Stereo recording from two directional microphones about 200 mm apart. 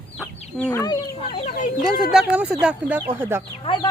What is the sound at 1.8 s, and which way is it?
Speech, 5° right (ahead or behind).